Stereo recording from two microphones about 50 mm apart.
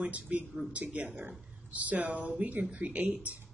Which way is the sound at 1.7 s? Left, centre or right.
Right.